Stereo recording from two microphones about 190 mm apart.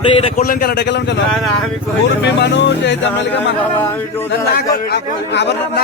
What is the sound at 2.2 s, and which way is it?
Speech, 65° left (ahead or behind).